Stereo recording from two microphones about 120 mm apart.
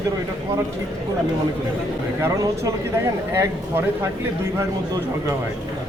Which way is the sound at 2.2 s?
25° right (ahead or behind).